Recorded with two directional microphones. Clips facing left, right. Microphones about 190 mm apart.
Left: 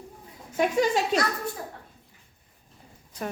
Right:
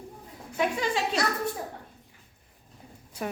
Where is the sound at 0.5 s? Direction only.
45° left (ahead or behind).